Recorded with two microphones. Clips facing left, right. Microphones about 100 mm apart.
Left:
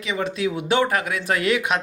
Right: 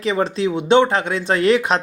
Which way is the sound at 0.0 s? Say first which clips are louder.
Right 5 dB; 35° right (ahead or behind).